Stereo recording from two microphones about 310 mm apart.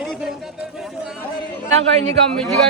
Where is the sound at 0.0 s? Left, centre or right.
Centre.